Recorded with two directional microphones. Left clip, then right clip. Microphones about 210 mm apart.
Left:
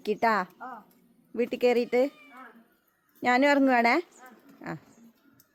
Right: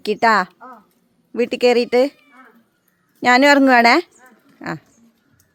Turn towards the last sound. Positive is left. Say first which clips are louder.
# right 11 dB
turn(degrees=-25)  # may be behind; listen again after turning